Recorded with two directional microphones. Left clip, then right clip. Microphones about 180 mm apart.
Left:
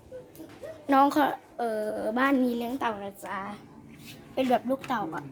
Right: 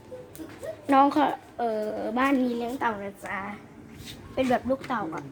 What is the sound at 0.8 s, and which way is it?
A woman's voice, 10° left (ahead or behind).